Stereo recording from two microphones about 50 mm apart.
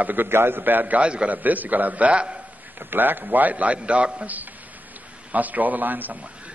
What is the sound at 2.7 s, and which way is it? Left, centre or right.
A man's voice, right.